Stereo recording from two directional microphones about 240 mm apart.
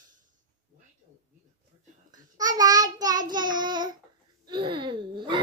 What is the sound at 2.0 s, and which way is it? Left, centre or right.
Child singing, centre.